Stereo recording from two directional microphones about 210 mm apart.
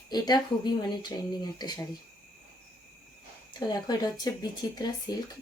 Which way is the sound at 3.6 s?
20° left (ahead or behind).